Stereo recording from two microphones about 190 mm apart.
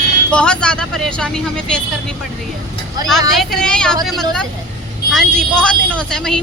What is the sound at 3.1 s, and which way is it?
Speech, centre (ahead or behind).